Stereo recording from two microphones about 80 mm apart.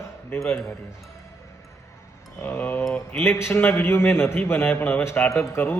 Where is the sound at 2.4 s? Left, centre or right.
Left.